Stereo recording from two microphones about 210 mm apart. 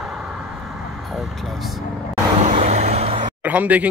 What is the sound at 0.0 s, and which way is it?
Vehicle, centre (ahead or behind).